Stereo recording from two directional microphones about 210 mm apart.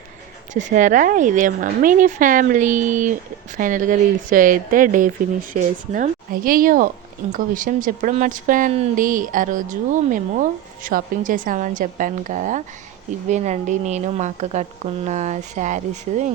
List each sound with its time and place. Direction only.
0.5 s speech: 35° right (ahead or behind)